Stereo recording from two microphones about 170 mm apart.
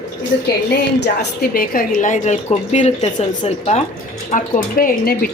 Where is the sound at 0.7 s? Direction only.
85° left.